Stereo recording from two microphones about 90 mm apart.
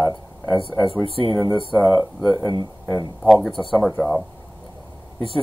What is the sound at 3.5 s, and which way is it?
Speech, centre (ahead or behind).